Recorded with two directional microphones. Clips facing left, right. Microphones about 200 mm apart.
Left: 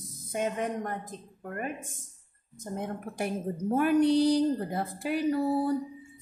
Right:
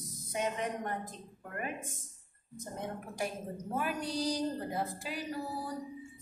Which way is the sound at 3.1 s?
60° left (ahead or behind).